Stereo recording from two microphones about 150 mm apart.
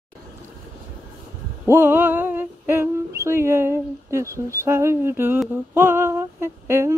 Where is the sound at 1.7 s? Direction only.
15° right (ahead or behind).